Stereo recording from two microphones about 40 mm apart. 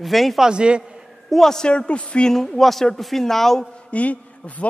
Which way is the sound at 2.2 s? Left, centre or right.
Centre.